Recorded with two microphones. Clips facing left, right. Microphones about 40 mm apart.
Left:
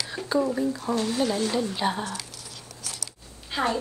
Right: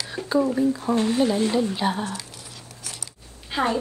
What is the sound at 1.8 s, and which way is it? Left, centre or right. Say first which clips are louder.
Speech: right 2 dB; centre.